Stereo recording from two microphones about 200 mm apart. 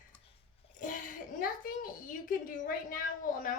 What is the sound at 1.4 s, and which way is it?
A woman's voice, 45° left (ahead or behind).